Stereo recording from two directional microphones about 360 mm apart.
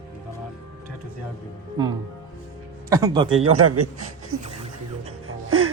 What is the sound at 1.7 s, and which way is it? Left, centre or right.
Speech, centre.